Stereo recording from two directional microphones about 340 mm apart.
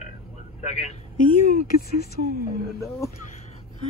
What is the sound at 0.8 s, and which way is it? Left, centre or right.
Speech, left.